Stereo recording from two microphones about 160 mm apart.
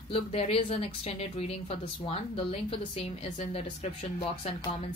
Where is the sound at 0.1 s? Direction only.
40° left (ahead or behind).